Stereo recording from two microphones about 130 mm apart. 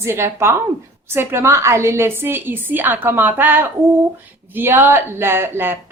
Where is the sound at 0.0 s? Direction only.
20° right (ahead or behind).